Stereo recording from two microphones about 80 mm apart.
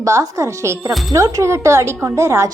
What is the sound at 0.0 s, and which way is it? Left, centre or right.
A woman's voice, right.